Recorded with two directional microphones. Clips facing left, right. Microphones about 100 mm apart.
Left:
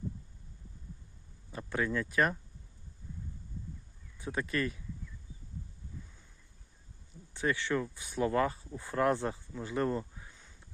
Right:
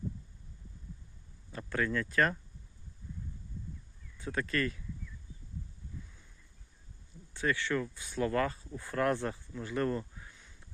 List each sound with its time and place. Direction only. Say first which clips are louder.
1.5 s speech: even; 15° left (ahead or behind)
4.2 s speech: even; 20° left (ahead or behind)
7.3 s speech: even; 20° left (ahead or behind)